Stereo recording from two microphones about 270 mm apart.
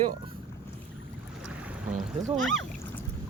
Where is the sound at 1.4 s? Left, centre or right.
Centre.